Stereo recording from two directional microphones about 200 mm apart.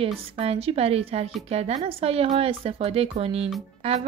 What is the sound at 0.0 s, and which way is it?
Speech, 30° right (ahead or behind).